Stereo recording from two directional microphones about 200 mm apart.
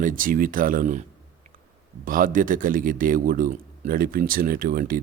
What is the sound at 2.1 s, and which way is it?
Speech, 45° right (ahead or behind).